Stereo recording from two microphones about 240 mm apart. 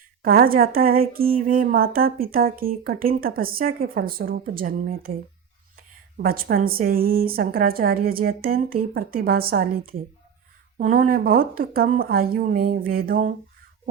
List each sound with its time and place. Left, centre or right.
0.2 s a woman's voice: right
10.8 s a woman's voice: right